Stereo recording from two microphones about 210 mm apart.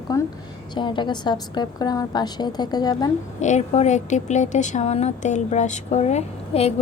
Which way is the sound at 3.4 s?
35° left (ahead or behind).